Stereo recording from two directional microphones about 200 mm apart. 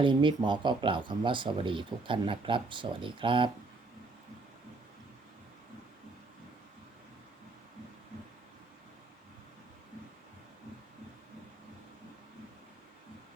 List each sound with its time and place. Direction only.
0.0 s speech: 25° right (ahead or behind)